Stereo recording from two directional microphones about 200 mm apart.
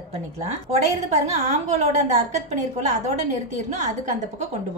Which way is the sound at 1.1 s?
35° right (ahead or behind).